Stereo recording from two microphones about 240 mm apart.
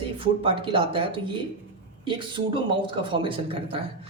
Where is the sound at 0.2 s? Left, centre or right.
Right.